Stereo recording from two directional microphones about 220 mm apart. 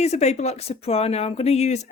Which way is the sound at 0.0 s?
30° left (ahead or behind).